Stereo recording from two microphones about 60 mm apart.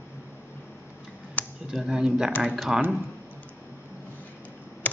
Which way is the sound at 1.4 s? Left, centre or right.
Left.